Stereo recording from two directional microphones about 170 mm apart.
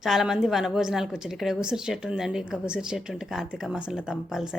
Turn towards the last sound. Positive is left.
turn(degrees=-5)  # may be behind; listen again after turning